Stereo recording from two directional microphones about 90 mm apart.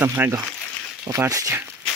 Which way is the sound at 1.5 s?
25° right (ahead or behind).